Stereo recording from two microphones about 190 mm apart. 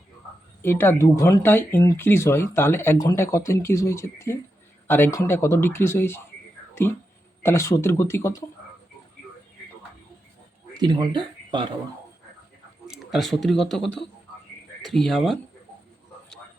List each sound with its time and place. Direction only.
0.6 s speech: 10° left (ahead or behind)
10.8 s speech: 20° right (ahead or behind)
12.9 s speech: centre (ahead or behind)